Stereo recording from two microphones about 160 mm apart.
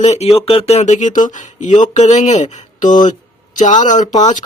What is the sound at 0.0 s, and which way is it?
Speech, 45° left (ahead or behind).